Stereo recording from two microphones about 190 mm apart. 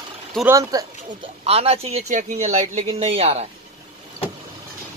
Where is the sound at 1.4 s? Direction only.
30° right (ahead or behind).